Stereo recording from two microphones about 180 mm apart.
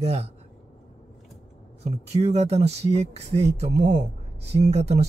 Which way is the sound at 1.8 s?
35° right (ahead or behind).